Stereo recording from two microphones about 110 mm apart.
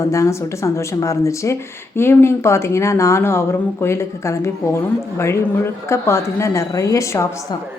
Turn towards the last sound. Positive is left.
turn(degrees=25)  # may be behind; listen again after turning